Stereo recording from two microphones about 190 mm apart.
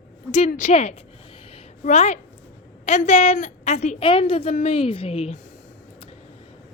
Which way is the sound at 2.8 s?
35° left (ahead or behind).